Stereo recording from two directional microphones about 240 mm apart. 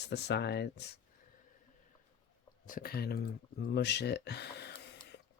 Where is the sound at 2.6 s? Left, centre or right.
Left.